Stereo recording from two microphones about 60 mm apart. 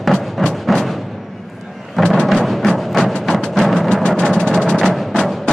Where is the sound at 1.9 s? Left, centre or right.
Centre.